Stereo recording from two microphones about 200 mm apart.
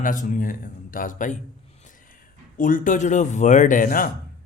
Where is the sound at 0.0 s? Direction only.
40° left (ahead or behind).